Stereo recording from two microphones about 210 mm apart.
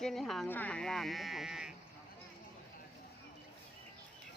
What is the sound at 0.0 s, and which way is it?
Speech, centre (ahead or behind).